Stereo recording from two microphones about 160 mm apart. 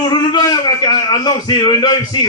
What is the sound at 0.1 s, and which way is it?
A man's voice, 25° left (ahead or behind).